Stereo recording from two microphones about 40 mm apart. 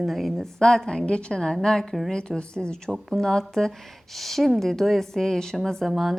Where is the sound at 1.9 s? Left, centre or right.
Centre.